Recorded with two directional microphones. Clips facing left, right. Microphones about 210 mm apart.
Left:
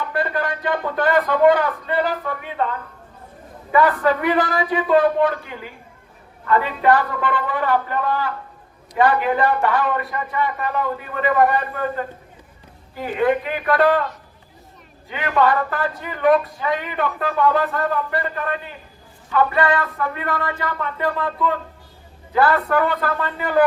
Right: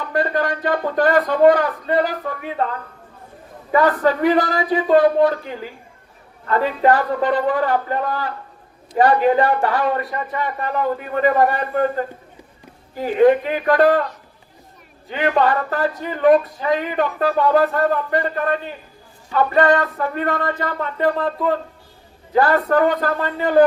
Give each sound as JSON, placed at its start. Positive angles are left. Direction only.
{"t": 0.1, "sound": "speech", "side_deg": -40}
{"t": 3.7, "sound": "speech", "side_deg": -35}
{"t": 15.1, "sound": "speech", "side_deg": -35}